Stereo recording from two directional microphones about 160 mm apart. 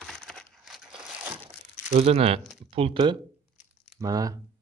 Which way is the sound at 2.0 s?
40° right (ahead or behind).